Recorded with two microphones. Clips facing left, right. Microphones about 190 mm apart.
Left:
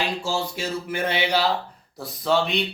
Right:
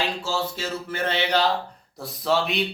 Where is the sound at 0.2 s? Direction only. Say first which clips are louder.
Left 1 dB; 15° left (ahead or behind).